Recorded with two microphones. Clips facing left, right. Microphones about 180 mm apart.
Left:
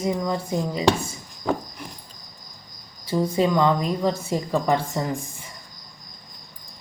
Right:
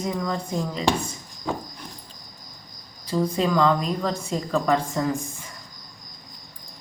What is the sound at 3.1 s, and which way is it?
Speech, 20° left (ahead or behind).